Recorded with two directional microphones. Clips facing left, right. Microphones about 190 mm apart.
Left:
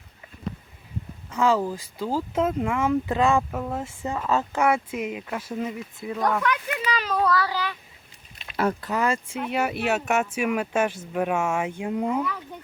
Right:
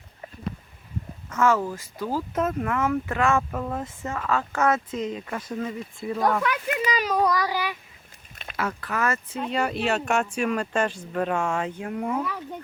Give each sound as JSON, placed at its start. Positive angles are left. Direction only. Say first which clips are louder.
{"t": 1.3, "sound": "speech", "louder": "even", "side_deg": 15}
{"t": 6.9, "sound": "child singing", "louder": "left 1 dB", "side_deg": -10}
{"t": 8.8, "sound": "speech", "louder": "left 2 dB", "side_deg": 20}
{"t": 11.8, "sound": "speech", "louder": "left 2 dB", "side_deg": 20}